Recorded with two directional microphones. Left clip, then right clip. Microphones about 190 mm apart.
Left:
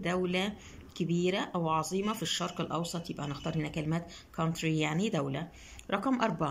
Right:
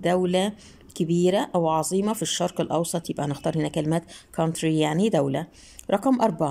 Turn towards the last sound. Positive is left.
turn(degrees=-30)  # may be behind; listen again after turning